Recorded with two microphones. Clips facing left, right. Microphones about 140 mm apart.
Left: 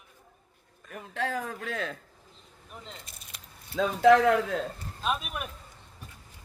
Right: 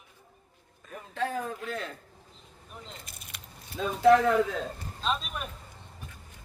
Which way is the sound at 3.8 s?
90° left.